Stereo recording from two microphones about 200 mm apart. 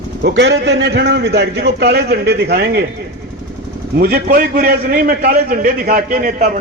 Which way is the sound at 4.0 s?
50° right (ahead or behind).